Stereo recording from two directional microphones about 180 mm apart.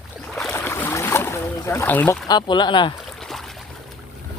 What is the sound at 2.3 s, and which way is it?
Speech, 25° left (ahead or behind).